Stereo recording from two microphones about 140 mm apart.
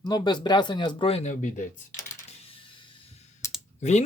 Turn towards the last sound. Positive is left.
turn(degrees=55)  # may be behind; listen again after turning